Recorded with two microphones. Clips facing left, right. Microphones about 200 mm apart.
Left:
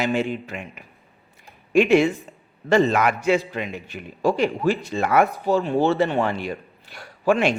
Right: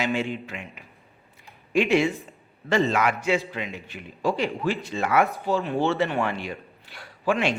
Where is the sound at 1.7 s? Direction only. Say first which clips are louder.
Left 5 dB; 50° left (ahead or behind).